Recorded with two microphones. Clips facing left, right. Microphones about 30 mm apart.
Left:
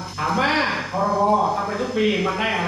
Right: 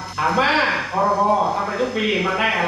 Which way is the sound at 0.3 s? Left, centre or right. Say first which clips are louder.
Right 2 dB; right.